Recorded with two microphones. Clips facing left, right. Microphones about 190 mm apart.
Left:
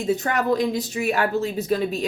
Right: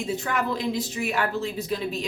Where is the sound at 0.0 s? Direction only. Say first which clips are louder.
Left 5 dB; 40° left (ahead or behind).